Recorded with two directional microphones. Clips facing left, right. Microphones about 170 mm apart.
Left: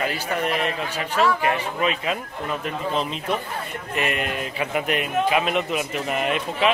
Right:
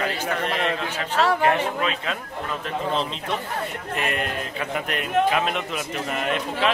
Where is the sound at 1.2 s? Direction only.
60° right (ahead or behind).